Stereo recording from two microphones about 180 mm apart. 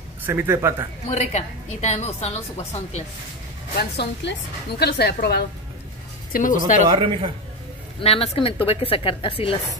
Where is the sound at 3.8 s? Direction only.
65° left (ahead or behind).